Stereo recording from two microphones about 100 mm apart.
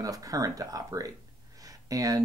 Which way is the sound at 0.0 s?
35° right (ahead or behind).